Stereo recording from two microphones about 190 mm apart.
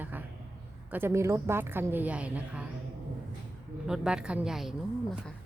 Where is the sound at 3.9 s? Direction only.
5° right (ahead or behind).